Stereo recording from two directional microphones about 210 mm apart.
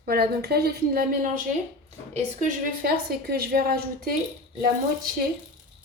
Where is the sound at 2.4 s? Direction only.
45° right (ahead or behind).